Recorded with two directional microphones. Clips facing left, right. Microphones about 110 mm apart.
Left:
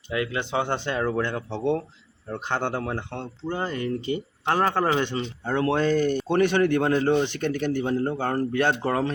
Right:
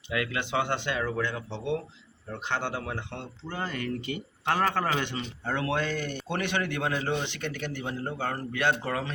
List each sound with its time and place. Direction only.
0.1 s speech: 30° left (ahead or behind)
3.5 s speech: 25° left (ahead or behind)